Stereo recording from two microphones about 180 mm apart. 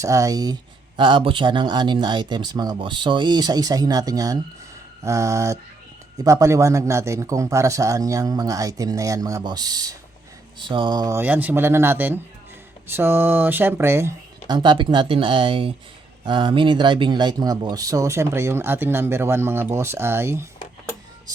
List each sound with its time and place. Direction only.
0.0 s a man's voice: 20° right (ahead or behind)